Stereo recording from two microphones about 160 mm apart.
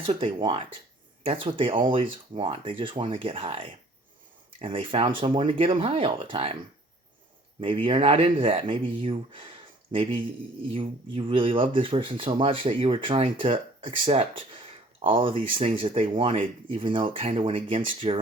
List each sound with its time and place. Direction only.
0.1 s speech: 35° right (ahead or behind)
7.6 s speech: 35° right (ahead or behind)